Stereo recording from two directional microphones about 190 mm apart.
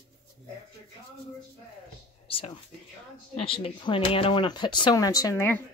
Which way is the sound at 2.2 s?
30° left (ahead or behind).